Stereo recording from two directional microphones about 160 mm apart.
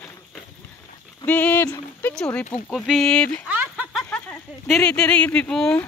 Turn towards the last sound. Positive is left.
turn(degrees=5)  # may be behind; listen again after turning